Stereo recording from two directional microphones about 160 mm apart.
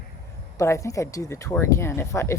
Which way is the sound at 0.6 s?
20° left (ahead or behind).